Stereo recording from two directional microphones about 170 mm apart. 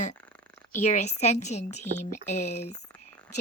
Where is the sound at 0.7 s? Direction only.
45° left (ahead or behind).